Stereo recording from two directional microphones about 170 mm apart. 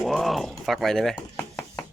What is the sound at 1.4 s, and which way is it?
Chopping, 15° left (ahead or behind).